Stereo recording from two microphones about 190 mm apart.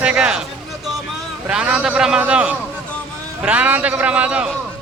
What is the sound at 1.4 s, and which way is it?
A man's voice, 5° right (ahead or behind).